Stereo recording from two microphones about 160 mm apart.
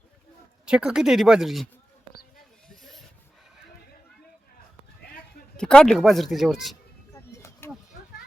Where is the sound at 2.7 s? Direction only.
Centre (ahead or behind).